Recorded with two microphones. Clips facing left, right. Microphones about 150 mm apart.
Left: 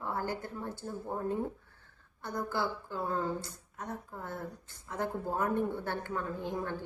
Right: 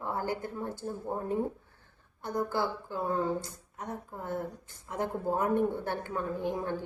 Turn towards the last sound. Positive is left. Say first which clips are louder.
# right 4 dB
turn(degrees=-15)  # may be behind; listen again after turning